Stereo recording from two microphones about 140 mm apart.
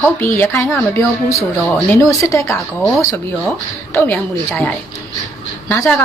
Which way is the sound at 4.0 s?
15° left (ahead or behind).